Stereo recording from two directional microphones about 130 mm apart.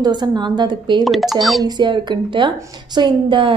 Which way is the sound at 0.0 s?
35° right (ahead or behind).